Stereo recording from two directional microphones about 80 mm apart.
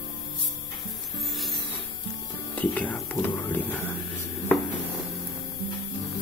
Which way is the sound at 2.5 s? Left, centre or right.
Centre.